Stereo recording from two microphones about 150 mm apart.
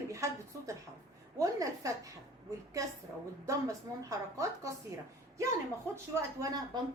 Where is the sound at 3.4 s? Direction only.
20° right (ahead or behind).